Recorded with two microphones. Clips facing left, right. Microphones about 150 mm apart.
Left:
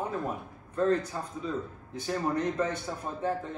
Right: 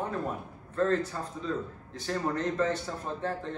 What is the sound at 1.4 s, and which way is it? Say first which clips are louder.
A man's voice: right 1 dB; 10° left (ahead or behind).